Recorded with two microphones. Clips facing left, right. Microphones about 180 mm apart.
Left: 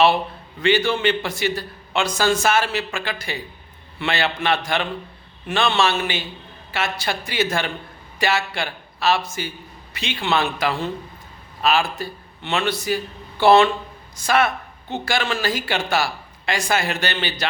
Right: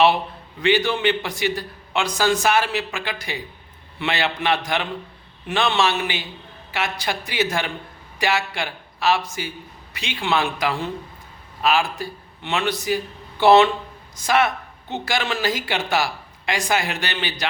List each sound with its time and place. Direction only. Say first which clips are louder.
0.6 s a man's voice: left 1 dB; 15° right (ahead or behind)